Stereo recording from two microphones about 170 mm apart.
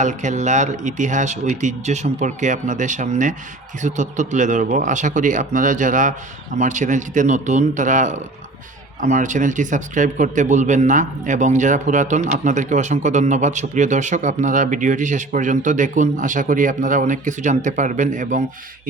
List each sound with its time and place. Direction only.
0.0 s a man's voice: 45° right (ahead or behind)